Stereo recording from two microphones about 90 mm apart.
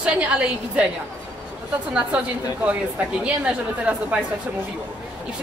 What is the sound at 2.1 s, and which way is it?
A woman's voice, 15° right (ahead or behind).